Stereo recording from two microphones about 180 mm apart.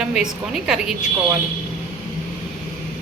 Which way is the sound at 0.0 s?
5° right (ahead or behind).